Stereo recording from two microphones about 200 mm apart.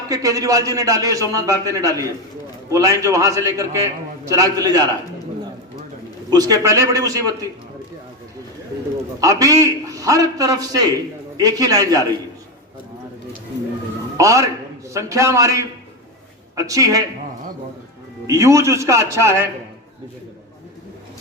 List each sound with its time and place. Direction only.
0.1 s a man's voice: 15° right (ahead or behind)
6.3 s a man's voice: 20° right (ahead or behind)
9.2 s a man's voice: 15° right (ahead or behind)
14.2 s a man's voice: 15° right (ahead or behind)
18.3 s a man's voice: 15° right (ahead or behind)